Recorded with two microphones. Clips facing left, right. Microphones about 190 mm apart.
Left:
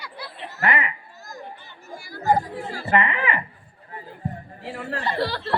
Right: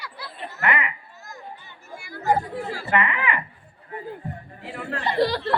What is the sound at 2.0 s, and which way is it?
Speech, 35° left (ahead or behind).